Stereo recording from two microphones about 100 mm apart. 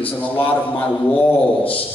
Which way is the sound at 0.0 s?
15° left (ahead or behind).